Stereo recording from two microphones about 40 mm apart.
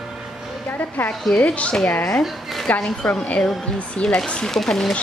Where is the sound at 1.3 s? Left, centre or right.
Left.